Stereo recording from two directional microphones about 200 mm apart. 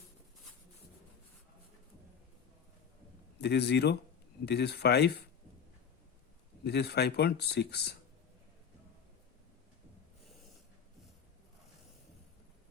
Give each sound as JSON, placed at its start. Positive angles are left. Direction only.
{"t": 3.4, "sound": "speech", "side_deg": 55}
{"t": 6.7, "sound": "speech", "side_deg": 55}